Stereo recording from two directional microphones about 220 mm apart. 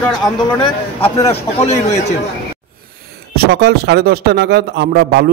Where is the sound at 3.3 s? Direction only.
45° right (ahead or behind).